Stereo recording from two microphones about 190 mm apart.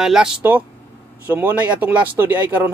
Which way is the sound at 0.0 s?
5° right (ahead or behind).